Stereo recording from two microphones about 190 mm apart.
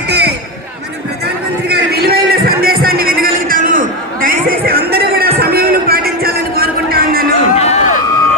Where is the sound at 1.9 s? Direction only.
55° right (ahead or behind).